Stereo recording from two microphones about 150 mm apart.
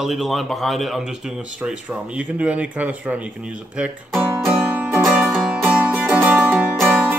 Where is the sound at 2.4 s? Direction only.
10° right (ahead or behind).